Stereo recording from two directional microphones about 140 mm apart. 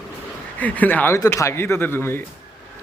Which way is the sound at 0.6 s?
10° left (ahead or behind).